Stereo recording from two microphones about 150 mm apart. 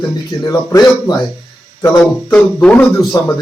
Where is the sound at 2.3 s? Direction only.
10° left (ahead or behind).